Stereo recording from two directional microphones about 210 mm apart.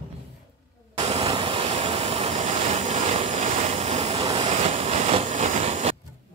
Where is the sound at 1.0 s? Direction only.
25° right (ahead or behind).